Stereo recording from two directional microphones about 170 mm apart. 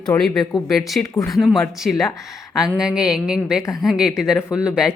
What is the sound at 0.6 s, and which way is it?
Speech, centre (ahead or behind).